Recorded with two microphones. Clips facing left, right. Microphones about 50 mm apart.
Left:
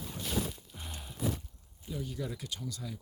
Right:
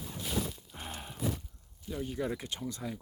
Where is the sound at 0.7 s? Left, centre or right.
Right.